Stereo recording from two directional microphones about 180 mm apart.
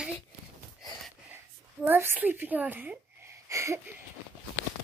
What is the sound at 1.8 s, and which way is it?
Speech, 10° right (ahead or behind).